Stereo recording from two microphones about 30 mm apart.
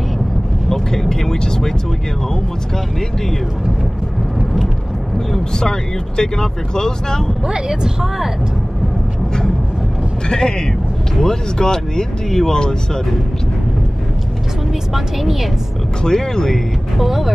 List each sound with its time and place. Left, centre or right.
0.7 s speech: centre
5.3 s speech: left
7.4 s a woman's voice: right
10.2 s speech: left
15.0 s speech: centre
16.0 s speech: left
17.0 s speech: centre